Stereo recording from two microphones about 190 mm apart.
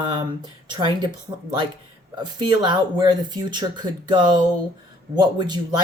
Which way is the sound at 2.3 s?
25° right (ahead or behind).